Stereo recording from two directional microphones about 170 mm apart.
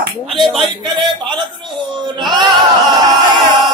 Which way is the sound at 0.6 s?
25° right (ahead or behind).